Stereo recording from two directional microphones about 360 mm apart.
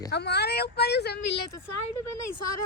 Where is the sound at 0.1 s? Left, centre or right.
Left.